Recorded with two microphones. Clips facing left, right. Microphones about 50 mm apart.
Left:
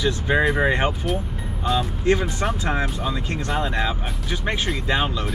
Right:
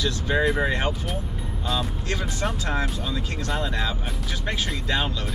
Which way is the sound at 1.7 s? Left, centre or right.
Centre.